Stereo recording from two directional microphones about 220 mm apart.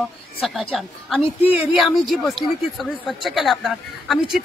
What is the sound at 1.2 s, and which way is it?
Speech, 25° left (ahead or behind).